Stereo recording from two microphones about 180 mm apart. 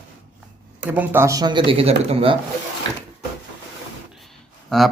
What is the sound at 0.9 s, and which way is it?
Speech, 10° right (ahead or behind).